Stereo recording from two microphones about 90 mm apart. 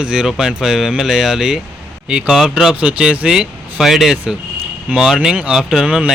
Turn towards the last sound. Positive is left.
turn(degrees=-10)  # may be behind; listen again after turning